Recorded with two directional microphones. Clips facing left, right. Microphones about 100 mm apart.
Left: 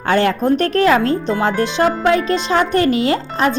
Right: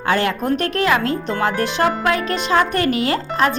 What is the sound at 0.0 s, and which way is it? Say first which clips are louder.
Speech: left 4 dB; 30° left (ahead or behind).